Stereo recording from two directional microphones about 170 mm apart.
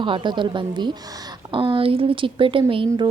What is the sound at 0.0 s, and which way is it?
A woman's voice, 30° right (ahead or behind).